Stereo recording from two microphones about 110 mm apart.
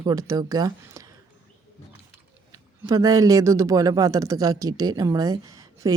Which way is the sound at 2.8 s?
30° right (ahead or behind).